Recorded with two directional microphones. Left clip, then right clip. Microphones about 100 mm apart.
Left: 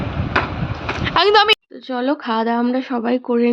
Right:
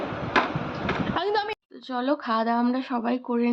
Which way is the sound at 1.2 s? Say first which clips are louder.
Left 17 dB; 35° left (ahead or behind).